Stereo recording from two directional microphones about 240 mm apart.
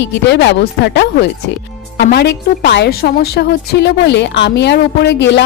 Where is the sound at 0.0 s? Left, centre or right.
Left.